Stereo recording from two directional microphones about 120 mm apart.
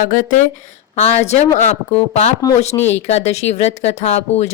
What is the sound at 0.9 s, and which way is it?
Speech, 65° left (ahead or behind).